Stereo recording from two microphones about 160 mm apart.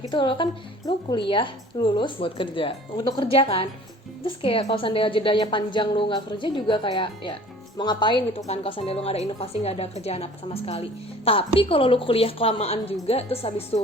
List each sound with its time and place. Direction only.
0.1 s a woman's voice: 30° left (ahead or behind)